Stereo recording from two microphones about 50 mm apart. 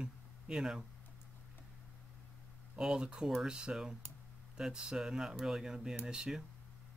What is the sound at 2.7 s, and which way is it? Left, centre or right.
Speech, centre.